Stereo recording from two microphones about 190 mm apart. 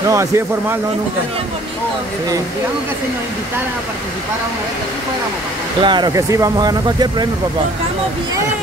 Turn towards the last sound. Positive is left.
turn(degrees=-20)  # may be behind; listen again after turning